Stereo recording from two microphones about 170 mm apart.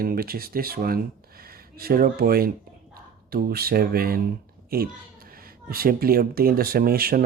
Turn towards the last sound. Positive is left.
turn(degrees=-60)  # may be behind; listen again after turning